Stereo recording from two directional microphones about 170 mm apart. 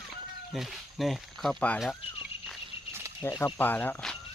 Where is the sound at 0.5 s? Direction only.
Centre (ahead or behind).